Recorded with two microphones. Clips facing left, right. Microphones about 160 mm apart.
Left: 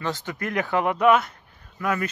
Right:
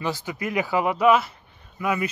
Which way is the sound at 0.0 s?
10° right (ahead or behind).